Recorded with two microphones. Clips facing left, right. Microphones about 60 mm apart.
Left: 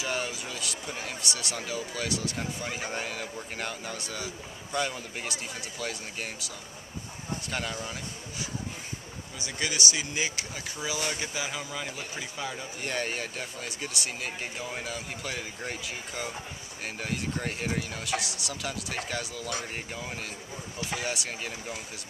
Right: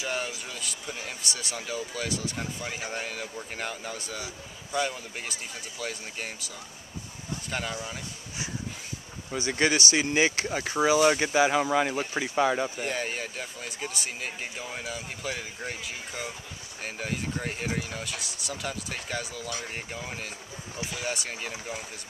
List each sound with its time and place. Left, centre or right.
0.0 s vehicle: centre
0.5 s speech: centre
9.5 s speech: right
12.2 s speech: right
12.8 s speech: centre